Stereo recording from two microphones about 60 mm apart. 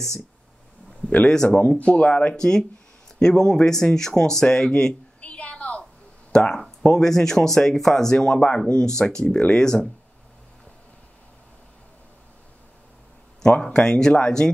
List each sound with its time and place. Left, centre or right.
1.2 s speech: centre
1.6 s speech: left
2.3 s speech: centre
5.2 s a sound: left
6.3 s speech: centre
13.4 s speech: centre